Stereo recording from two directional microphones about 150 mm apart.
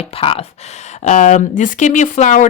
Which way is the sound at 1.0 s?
50° left (ahead or behind).